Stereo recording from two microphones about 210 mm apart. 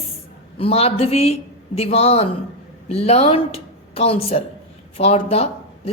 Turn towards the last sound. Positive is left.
turn(degrees=30)  # may be behind; listen again after turning